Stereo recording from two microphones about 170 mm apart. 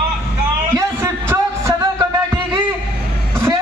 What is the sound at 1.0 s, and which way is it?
Music, 15° right (ahead or behind).